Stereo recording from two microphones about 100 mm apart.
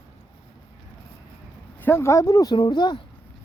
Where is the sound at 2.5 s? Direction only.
45° left (ahead or behind).